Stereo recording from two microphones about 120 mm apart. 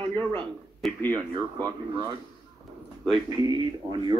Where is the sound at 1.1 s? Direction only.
35° right (ahead or behind).